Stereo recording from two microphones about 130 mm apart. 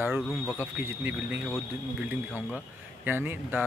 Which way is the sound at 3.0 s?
15° right (ahead or behind).